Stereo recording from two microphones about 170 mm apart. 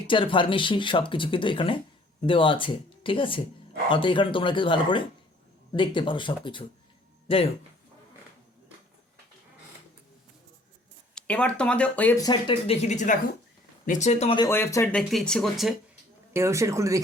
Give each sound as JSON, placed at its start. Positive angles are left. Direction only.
{"t": 0.1, "sound": "speech", "side_deg": 30}
{"t": 11.1, "sound": "speech", "side_deg": 5}
{"t": 12.2, "sound": "speech", "side_deg": 30}
{"t": 14.3, "sound": "speech", "side_deg": 15}
{"t": 14.9, "sound": "speech", "side_deg": 5}
{"t": 16.3, "sound": "speech", "side_deg": -15}